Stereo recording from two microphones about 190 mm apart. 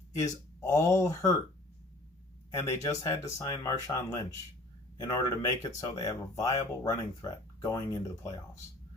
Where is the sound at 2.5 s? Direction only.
15° left (ahead or behind).